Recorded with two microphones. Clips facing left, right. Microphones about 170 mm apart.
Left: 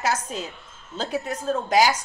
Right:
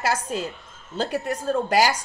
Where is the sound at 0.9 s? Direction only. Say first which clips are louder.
Right 2 dB; 65° right (ahead or behind).